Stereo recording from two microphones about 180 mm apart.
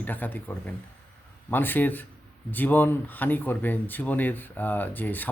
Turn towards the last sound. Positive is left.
turn(degrees=10)  # may be behind; listen again after turning